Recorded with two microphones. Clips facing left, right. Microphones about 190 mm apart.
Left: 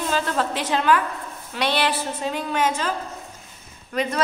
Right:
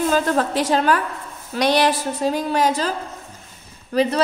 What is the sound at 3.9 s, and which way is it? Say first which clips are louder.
Speech: right 6 dB; 35° right (ahead or behind).